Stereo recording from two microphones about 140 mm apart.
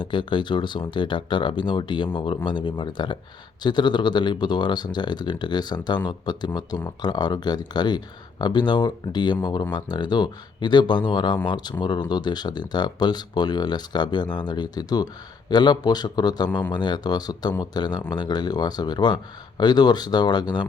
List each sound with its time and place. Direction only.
0.0 s speech: 35° left (ahead or behind)